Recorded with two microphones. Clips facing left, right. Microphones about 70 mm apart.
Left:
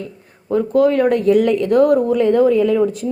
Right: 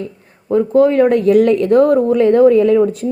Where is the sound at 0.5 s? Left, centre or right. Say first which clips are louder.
Right 3 dB; right.